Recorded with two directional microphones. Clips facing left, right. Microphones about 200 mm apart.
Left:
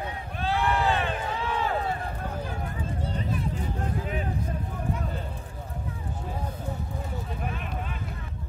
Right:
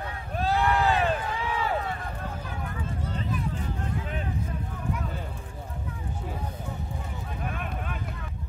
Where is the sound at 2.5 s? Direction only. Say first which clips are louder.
Left 1 dB; 30° left (ahead or behind).